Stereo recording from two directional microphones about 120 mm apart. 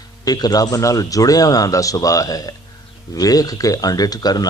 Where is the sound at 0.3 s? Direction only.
35° left (ahead or behind).